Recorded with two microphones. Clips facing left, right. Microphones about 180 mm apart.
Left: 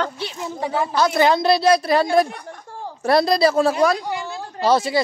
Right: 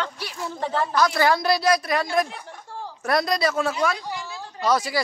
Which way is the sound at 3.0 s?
30° left (ahead or behind).